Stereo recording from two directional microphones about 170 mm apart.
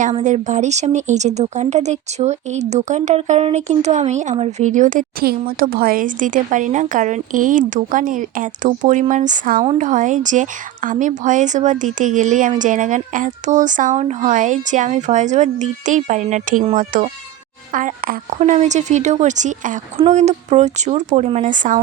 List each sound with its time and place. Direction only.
0.0 s speech: 45° right (ahead or behind)